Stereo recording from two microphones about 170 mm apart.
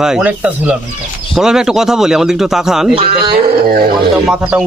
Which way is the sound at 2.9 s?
35° right (ahead or behind).